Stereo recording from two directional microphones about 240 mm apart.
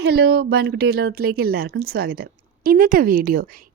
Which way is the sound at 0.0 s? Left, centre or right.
Right.